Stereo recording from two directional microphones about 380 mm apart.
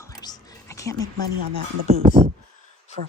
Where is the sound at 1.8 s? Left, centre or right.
Centre.